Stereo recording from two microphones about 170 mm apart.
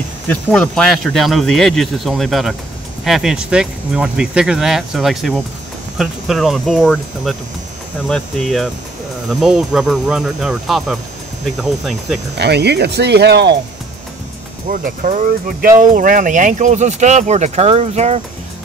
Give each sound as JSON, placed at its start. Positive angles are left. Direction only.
{"t": 0.3, "sound": "speech", "side_deg": 5}
{"t": 12.4, "sound": "speech", "side_deg": -75}
{"t": 14.7, "sound": "speech", "side_deg": -50}